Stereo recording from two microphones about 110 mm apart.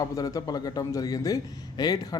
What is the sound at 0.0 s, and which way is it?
Speech, 30° left (ahead or behind).